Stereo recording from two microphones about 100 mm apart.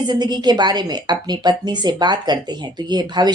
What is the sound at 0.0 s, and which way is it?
Speech, 45° right (ahead or behind).